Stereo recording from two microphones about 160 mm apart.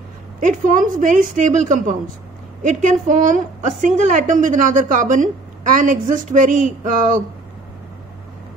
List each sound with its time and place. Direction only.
0.4 s a woman's voice: 55° right (ahead or behind)